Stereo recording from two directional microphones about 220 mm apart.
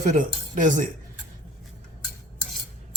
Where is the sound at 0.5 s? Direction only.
35° right (ahead or behind).